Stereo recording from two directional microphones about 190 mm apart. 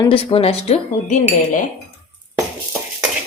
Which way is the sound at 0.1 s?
30° left (ahead or behind).